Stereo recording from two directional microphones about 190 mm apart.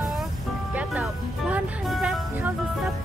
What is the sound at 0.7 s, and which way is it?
Music, 5° right (ahead or behind).